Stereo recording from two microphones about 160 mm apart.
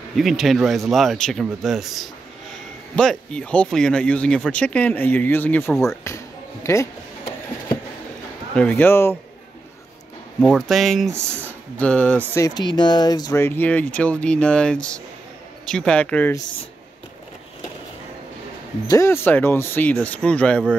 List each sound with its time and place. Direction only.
0.1 s speech: centre (ahead or behind)
6.0 s a sound: 20° left (ahead or behind)
8.5 s speech: 10° left (ahead or behind)
10.4 s speech: centre (ahead or behind)
12.4 s speech: 25° left (ahead or behind)
18.9 s speech: 15° left (ahead or behind)